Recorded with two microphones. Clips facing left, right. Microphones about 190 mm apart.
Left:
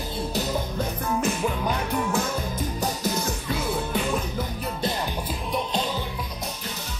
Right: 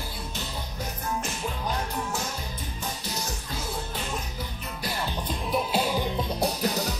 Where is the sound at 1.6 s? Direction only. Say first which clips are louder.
Left 5 dB; 80° left.